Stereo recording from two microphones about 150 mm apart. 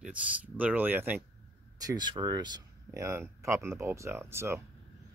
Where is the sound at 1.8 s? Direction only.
25° right (ahead or behind).